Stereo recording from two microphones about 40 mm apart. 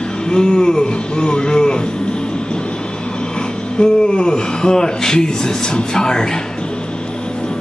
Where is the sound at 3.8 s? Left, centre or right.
Left.